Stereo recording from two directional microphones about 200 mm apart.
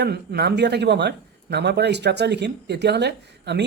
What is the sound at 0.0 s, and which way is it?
A man's voice, 55° right (ahead or behind).